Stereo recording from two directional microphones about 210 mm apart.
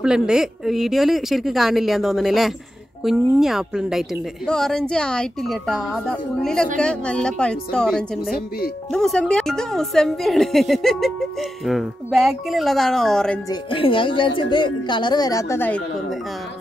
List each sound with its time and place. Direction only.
0.0 s a woman's voice: 5° right (ahead or behind)
13.5 s speech: 25° left (ahead or behind); by 16.2 s 5° left (ahead or behind)